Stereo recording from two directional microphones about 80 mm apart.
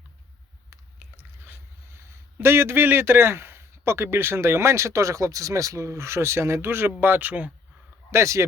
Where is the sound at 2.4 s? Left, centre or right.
Right.